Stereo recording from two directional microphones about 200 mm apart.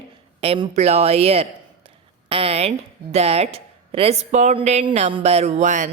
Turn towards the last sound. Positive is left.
turn(degrees=-40)  # may be behind; listen again after turning